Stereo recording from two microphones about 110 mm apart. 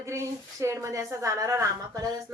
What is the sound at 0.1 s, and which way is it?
A woman's voice, 25° right (ahead or behind).